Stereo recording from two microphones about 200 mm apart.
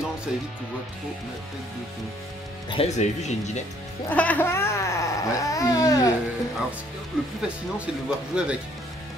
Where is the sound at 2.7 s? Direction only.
30° left (ahead or behind).